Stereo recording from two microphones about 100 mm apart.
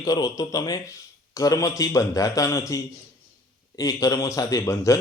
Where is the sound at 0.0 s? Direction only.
35° left (ahead or behind).